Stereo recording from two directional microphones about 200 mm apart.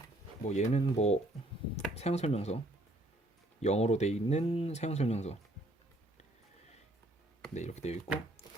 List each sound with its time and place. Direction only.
0.4 s speech: 35° left (ahead or behind)
3.6 s speech: 35° left (ahead or behind)
7.5 s speech: 35° left (ahead or behind)